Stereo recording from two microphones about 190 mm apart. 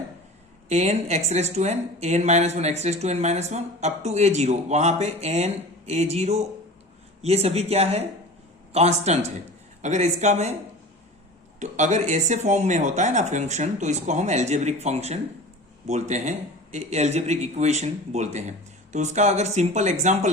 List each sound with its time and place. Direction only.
0.7 s speech: 35° right (ahead or behind)
11.6 s speech: 40° right (ahead or behind)